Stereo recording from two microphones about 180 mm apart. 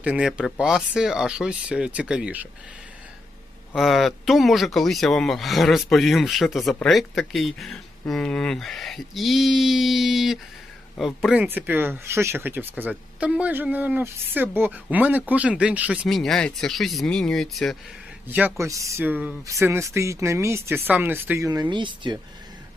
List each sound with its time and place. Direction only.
0.0 s speech: 5° right (ahead or behind)
3.8 s speech: centre (ahead or behind)
18.3 s speech: 10° right (ahead or behind); by 22.2 s 25° right (ahead or behind)